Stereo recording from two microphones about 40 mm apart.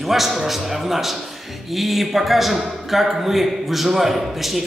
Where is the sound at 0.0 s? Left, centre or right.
Centre.